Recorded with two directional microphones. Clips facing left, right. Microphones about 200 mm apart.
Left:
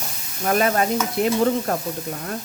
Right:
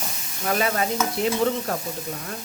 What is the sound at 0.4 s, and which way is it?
Speech, 50° left (ahead or behind).